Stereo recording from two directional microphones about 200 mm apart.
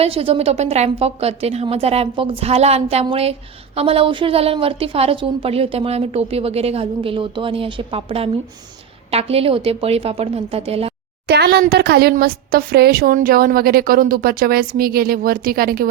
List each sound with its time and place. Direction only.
0.0 s a woman's voice: 30° right (ahead or behind)
11.3 s a woman's voice: 55° right (ahead or behind)